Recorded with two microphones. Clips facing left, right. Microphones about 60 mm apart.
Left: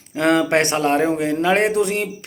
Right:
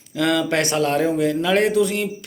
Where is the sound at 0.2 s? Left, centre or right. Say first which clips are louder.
Left 3 dB; left.